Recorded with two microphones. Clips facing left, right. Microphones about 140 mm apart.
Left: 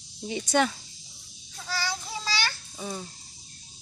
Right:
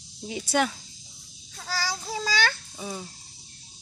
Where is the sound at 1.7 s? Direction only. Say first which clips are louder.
Right 2 dB; 40° right (ahead or behind).